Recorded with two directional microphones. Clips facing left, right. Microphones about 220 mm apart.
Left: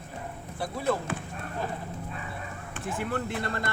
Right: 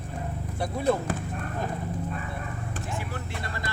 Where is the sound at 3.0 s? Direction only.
55° left (ahead or behind).